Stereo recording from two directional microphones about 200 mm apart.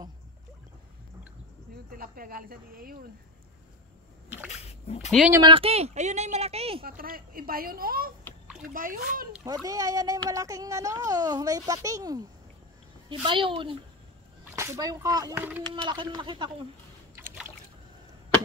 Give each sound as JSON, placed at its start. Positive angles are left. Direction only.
{"t": 1.9, "sound": "speech", "side_deg": -45}
{"t": 4.5, "sound": "a sound", "side_deg": 30}
{"t": 5.3, "sound": "a woman's voice", "side_deg": -25}
{"t": 6.8, "sound": "speech", "side_deg": -45}
{"t": 9.4, "sound": "a woman's voice", "side_deg": -15}
{"t": 14.4, "sound": "a child's voice", "side_deg": -15}
{"t": 15.7, "sound": "speech", "side_deg": -25}
{"t": 17.1, "sound": "boat", "side_deg": -10}